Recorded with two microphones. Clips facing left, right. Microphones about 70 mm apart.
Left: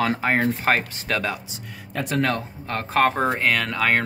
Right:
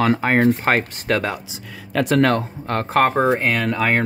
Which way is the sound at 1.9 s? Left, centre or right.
Right.